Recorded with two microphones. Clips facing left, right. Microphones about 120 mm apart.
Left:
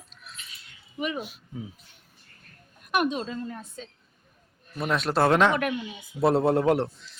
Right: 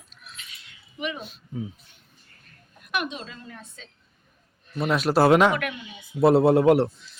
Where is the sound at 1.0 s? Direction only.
40° left (ahead or behind).